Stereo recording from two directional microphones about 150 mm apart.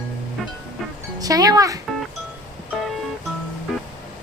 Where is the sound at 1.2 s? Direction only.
25° right (ahead or behind).